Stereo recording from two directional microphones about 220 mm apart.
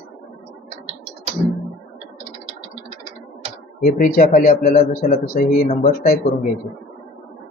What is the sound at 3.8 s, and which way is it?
Speech, 40° left (ahead or behind).